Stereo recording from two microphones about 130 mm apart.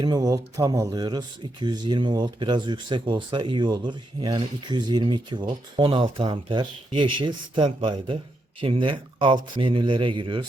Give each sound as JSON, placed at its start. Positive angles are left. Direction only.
{"t": 0.0, "sound": "speech", "side_deg": -30}